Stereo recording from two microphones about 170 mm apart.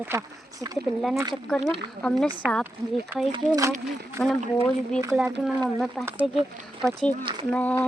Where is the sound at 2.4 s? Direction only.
15° right (ahead or behind).